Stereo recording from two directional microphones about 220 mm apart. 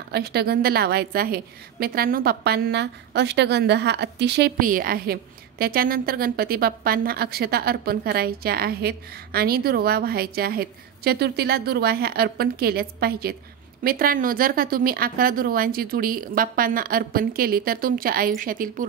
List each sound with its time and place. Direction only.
0.1 s a woman's voice: 45° right (ahead or behind)